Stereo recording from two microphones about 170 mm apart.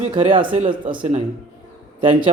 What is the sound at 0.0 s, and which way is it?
A man's voice, 30° right (ahead or behind).